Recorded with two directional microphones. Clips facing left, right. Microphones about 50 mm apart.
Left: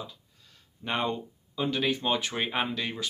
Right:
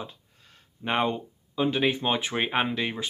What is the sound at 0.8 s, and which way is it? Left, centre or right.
Speech, right.